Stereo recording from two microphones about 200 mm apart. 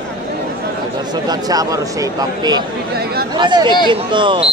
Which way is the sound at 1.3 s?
20° right (ahead or behind).